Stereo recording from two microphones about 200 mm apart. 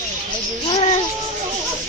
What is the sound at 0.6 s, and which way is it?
Speech, 30° left (ahead or behind).